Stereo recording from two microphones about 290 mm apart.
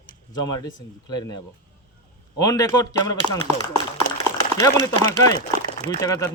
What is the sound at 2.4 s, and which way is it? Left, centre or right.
Speech, centre.